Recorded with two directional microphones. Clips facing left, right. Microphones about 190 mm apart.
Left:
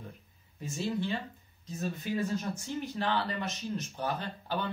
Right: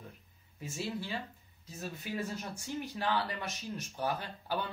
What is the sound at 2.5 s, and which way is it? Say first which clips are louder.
Speech: left 3 dB; 10° right (ahead or behind).